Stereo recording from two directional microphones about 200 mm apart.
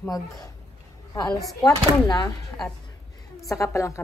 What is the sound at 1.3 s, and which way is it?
Speech, 20° left (ahead or behind).